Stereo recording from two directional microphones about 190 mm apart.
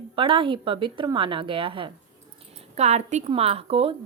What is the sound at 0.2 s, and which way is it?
Speech, 25° right (ahead or behind).